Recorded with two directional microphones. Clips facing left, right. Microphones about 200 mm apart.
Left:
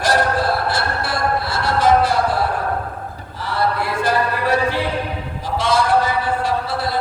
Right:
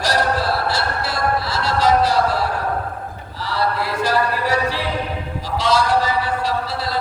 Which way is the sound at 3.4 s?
50° left (ahead or behind).